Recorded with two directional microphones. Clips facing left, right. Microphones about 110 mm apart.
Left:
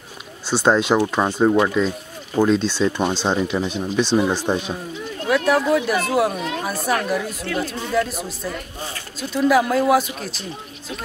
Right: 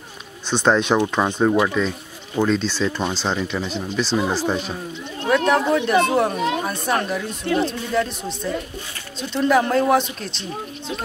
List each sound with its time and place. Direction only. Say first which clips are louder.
0.5 s speech: left 1 dB; 10° left (ahead or behind)
5.3 s speech: even; 5° left (ahead or behind)
7.4 s speech: right 4 dB; 25° right (ahead or behind)
7.9 s speech: left 1 dB; 5° left (ahead or behind)